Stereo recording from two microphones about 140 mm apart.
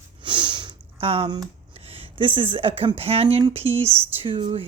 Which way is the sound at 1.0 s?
40° right (ahead or behind).